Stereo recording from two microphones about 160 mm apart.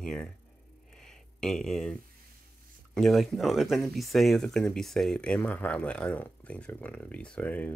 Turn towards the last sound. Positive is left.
turn(degrees=10)  # may be behind; listen again after turning